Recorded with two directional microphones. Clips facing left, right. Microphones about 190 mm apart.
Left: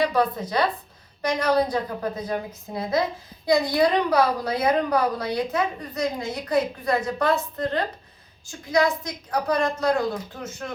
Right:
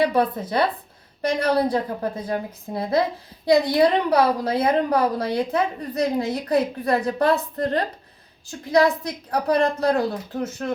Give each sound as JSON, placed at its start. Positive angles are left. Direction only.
{"t": 0.0, "sound": "a woman's voice", "side_deg": -25}